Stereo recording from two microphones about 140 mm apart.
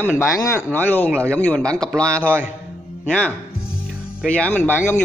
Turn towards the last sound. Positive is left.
turn(degrees=15)  # may be behind; listen again after turning